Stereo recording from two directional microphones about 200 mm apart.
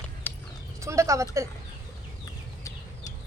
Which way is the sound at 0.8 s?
15° right (ahead or behind).